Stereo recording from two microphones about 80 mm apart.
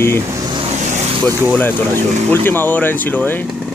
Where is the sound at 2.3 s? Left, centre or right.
Left.